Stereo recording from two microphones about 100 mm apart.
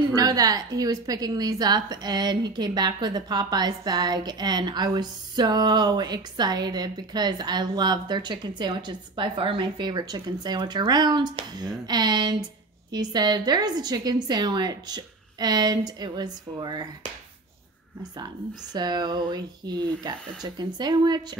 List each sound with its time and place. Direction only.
0.1 s a woman's voice: 40° right (ahead or behind)
18.7 s a woman's voice: 45° right (ahead or behind)